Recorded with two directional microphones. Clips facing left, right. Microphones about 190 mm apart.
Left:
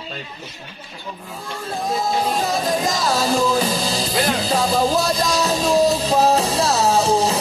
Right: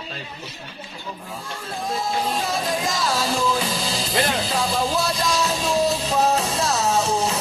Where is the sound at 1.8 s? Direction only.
40° left (ahead or behind).